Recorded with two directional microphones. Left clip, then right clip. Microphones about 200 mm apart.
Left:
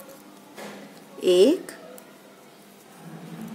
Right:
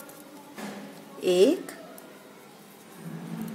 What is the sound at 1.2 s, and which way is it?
Speech, 15° left (ahead or behind).